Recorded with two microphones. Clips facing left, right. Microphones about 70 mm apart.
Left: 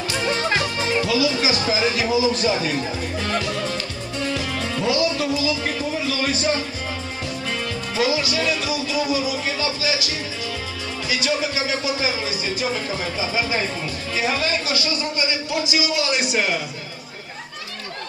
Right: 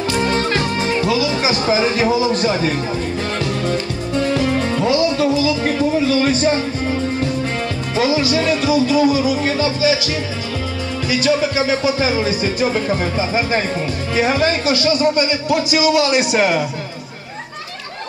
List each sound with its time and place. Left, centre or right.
0.2 s music: right
0.6 s speech: right
3.6 s music: right
4.5 s speech: right
11.1 s speech: right
16.3 s speech: right